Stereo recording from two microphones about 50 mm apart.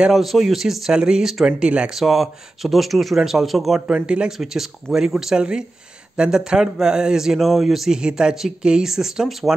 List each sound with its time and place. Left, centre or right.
0.1 s speech: centre
3.8 s speech: right
4.3 s speech: centre